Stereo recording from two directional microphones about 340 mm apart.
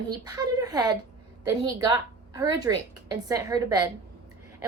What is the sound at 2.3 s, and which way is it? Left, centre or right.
A woman's voice, centre.